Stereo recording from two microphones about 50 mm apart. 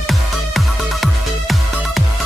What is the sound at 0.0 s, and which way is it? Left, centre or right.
Music, centre.